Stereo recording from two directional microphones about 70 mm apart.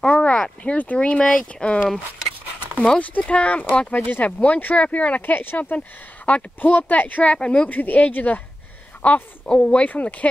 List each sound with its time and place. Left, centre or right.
0.0 s speech: centre
3.0 s speech: centre